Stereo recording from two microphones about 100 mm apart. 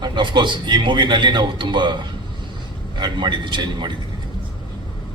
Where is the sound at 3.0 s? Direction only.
50° right (ahead or behind).